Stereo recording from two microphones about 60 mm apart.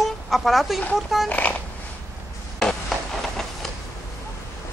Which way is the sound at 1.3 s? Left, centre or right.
Left.